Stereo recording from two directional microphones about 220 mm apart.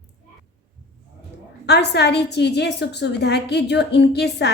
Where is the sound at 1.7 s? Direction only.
50° left (ahead or behind).